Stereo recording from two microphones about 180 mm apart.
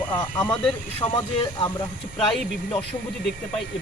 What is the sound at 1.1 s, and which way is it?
Speech, 25° left (ahead or behind).